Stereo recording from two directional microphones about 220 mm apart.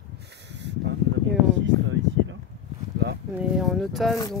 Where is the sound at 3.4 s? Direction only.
Centre (ahead or behind).